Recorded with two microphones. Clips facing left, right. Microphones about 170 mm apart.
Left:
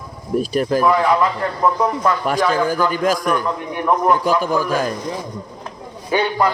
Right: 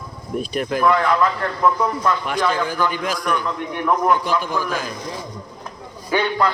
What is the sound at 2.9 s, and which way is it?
A man's voice, 45° left (ahead or behind).